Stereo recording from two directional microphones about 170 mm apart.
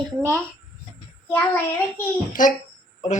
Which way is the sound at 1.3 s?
10° left (ahead or behind).